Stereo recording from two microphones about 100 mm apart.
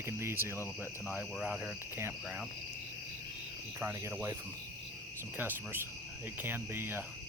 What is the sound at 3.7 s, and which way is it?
Speech, 25° right (ahead or behind).